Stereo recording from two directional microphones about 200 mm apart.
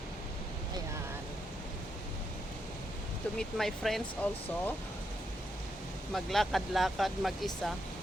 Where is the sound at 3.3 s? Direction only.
Centre (ahead or behind).